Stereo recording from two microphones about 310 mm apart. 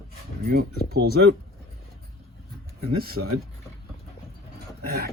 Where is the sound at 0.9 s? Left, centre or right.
Right.